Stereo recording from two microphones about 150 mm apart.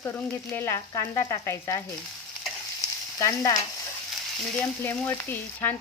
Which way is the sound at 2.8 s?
20° left (ahead or behind).